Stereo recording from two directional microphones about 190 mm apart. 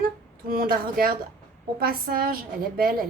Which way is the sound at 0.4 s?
50° right (ahead or behind).